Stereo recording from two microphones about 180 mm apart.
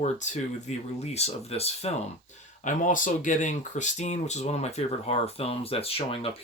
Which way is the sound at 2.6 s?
45° left (ahead or behind).